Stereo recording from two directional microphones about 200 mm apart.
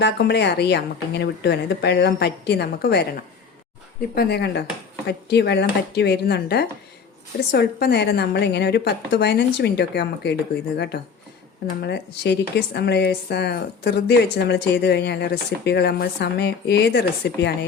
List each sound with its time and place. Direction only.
0.0 s a woman's voice: 55° left (ahead or behind)